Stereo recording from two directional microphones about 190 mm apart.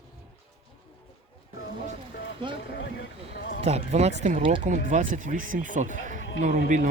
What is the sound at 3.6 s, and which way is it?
Speech, 35° right (ahead or behind).